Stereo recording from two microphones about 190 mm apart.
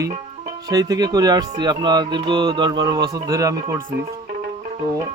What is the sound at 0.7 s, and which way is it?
Mantra, 20° right (ahead or behind).